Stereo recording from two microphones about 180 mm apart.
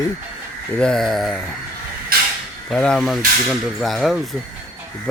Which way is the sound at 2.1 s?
55° right (ahead or behind).